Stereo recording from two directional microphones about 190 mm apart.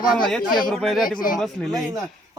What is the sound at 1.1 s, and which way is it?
Speech, 45° left (ahead or behind).